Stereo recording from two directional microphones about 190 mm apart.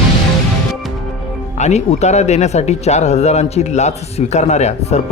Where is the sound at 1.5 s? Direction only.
35° left (ahead or behind).